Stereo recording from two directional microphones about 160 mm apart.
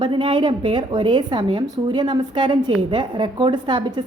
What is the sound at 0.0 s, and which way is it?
A woman's voice, 30° right (ahead or behind).